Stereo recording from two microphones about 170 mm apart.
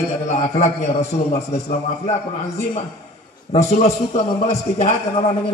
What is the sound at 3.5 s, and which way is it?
A man's voice, 40° left (ahead or behind).